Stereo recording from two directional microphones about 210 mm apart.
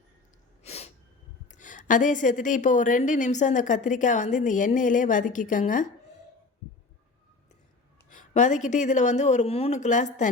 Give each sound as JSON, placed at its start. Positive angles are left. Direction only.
{"t": 0.6, "sound": "sneeze", "side_deg": 30}
{"t": 1.5, "sound": "a woman's voice", "side_deg": 35}
{"t": 8.3, "sound": "a woman's voice", "side_deg": 35}